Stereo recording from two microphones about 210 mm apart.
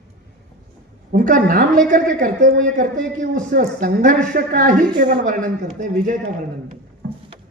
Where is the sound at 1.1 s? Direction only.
40° right (ahead or behind).